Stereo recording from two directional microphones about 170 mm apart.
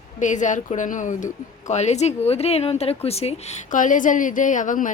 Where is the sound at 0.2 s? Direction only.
45° left (ahead or behind).